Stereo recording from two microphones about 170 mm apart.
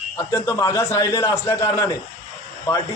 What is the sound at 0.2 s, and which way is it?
A man's voice, 15° left (ahead or behind).